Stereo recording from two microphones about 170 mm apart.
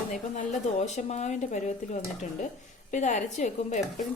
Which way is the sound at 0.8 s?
40° left (ahead or behind).